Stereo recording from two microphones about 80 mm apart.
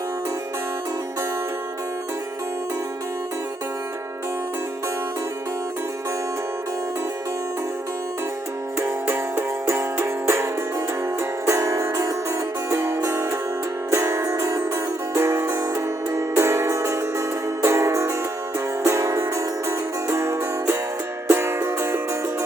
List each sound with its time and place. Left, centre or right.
8.8 s music: right